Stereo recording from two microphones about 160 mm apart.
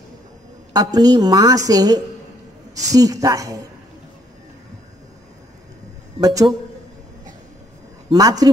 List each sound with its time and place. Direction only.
0.7 s a woman's voice: 25° right (ahead or behind)
6.2 s a woman's voice: 25° right (ahead or behind)
8.1 s a woman's voice: 25° right (ahead or behind)